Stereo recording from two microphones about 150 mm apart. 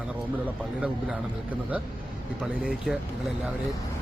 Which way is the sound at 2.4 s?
5° right (ahead or behind).